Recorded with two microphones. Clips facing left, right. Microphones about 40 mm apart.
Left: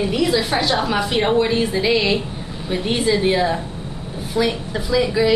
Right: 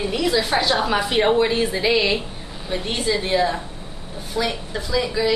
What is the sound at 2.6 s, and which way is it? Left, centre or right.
A woman's voice, centre.